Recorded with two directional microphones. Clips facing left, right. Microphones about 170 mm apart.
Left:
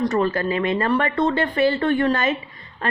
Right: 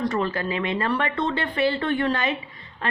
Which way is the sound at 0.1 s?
45° left (ahead or behind).